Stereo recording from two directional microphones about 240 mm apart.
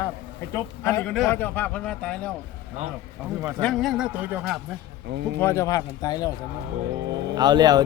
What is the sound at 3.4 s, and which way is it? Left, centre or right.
Speech, centre.